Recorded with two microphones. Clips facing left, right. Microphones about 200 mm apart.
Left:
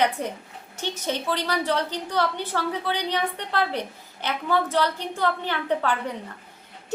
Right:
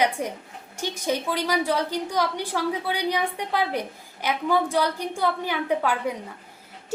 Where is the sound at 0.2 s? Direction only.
10° right (ahead or behind).